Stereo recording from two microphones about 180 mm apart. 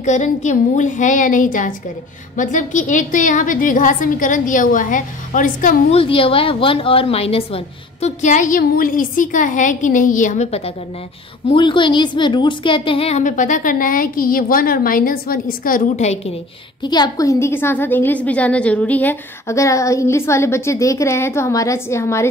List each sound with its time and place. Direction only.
0.0 s a woman's voice: 40° left (ahead or behind)
5.9 s a woman's voice: 30° left (ahead or behind)
16.8 s a woman's voice: 25° left (ahead or behind)